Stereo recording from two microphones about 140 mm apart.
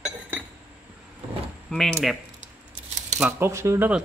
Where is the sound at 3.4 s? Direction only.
20° right (ahead or behind).